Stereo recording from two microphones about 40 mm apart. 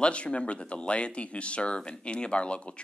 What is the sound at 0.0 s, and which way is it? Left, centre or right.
Speech, left.